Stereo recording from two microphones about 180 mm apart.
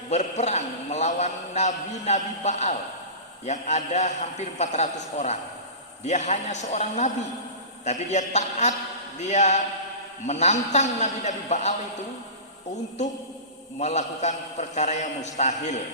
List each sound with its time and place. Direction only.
0.1 s a man's voice: 40° left (ahead or behind)
13.7 s a man's voice: 40° left (ahead or behind)